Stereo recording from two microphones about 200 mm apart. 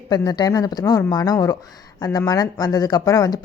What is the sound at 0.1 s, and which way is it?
A woman's voice, 20° left (ahead or behind).